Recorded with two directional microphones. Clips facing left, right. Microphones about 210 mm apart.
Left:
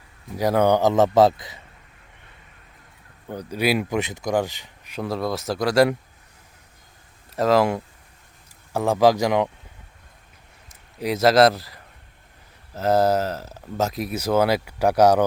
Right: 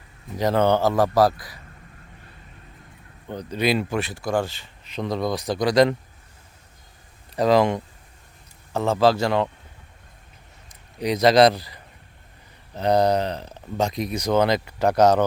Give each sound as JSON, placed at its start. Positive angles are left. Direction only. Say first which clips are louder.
{"t": 0.3, "sound": "a man's voice", "louder": "left 1 dB", "side_deg": 10}
{"t": 3.2, "sound": "speech", "louder": "even", "side_deg": 10}
{"t": 7.3, "sound": "speech", "louder": "right 1 dB", "side_deg": 0}
{"t": 11.0, "sound": "speech", "louder": "even", "side_deg": 5}